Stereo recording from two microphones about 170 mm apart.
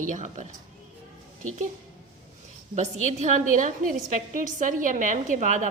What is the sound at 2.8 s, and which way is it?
A woman's voice, 45° right (ahead or behind).